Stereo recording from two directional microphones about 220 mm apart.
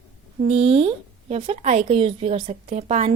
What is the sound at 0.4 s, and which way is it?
A woman's voice, 25° right (ahead or behind).